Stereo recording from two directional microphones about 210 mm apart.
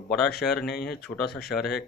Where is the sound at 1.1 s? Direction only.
20° left (ahead or behind).